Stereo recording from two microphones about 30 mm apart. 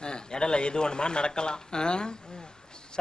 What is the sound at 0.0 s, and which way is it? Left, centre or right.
A man's voice, left.